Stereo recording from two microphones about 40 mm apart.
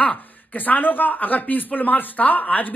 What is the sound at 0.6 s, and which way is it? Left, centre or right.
Speech, left.